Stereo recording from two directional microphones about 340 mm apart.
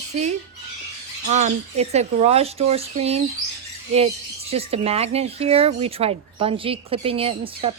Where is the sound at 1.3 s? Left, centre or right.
Centre.